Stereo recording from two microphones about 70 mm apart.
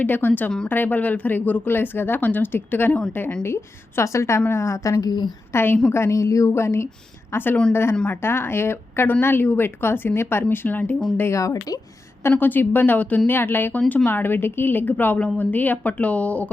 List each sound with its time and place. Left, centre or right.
0.0 s a woman's voice: left
5.5 s speech: left
5.9 s speech: left
11.2 s a woman's voice: left
12.4 s speech: left